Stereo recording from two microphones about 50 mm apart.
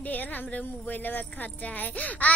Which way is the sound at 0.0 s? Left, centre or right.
Left.